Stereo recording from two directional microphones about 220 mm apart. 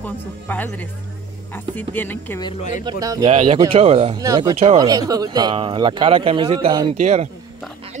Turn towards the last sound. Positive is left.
turn(degrees=-30)  # may be behind; listen again after turning